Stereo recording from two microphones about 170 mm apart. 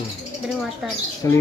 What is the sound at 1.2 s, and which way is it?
Speech, 15° left (ahead or behind).